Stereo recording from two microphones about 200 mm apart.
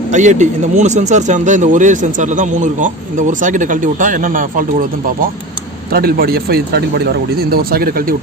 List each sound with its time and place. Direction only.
0.1 s speech: 35° right (ahead or behind)